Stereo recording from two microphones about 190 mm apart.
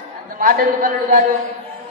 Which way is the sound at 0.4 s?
45° right (ahead or behind).